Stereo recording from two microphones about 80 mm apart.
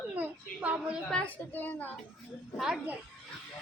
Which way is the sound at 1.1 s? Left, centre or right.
Centre.